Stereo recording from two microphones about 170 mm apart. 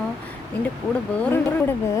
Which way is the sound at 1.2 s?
15° left (ahead or behind).